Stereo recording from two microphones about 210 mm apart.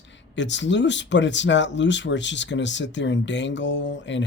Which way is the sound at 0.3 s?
60° left (ahead or behind).